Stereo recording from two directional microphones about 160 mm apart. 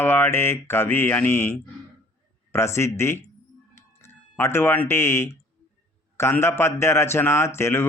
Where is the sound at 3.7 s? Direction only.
15° left (ahead or behind).